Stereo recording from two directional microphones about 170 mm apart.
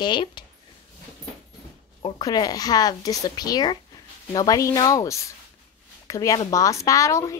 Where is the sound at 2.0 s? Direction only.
25° left (ahead or behind).